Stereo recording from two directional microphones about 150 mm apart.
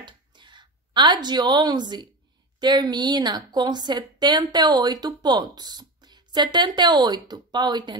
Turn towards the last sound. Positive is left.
turn(degrees=-30)  # may be behind; listen again after turning